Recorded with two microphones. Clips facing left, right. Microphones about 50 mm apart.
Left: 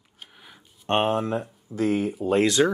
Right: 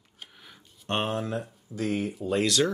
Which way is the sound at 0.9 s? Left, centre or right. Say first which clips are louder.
Left 6 dB; left.